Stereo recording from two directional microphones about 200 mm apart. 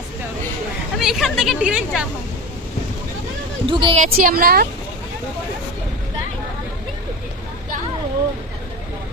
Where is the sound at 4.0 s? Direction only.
45° right (ahead or behind).